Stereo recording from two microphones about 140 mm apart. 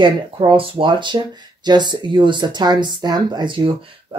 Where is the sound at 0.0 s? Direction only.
35° right (ahead or behind).